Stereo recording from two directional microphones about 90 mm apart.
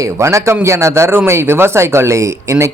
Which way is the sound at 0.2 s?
35° right (ahead or behind).